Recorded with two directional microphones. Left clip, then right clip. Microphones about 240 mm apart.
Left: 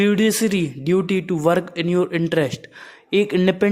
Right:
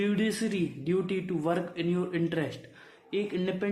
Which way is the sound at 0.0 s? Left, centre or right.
Left.